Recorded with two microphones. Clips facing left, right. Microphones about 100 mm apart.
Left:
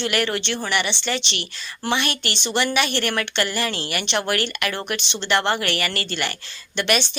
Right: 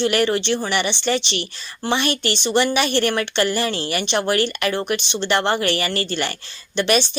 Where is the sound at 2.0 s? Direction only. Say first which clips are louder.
Right 4 dB; 35° right (ahead or behind).